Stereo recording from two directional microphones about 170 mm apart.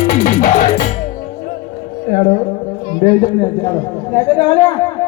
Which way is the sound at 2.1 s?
40° left (ahead or behind).